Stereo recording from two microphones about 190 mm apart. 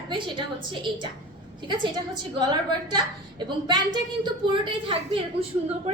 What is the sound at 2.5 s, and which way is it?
A woman's voice, 25° right (ahead or behind).